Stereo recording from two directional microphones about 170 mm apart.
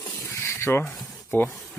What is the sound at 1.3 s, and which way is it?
Speech, 15° left (ahead or behind).